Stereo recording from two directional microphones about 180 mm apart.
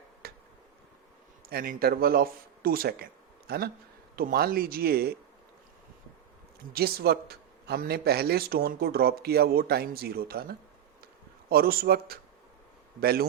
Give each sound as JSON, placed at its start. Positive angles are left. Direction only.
{"t": 0.2, "sound": "a sound", "side_deg": -60}
{"t": 1.5, "sound": "speech", "side_deg": -55}
{"t": 6.7, "sound": "speech", "side_deg": -60}